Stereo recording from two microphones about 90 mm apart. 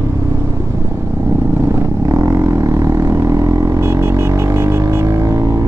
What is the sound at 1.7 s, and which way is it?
Vehicle, 35° right (ahead or behind).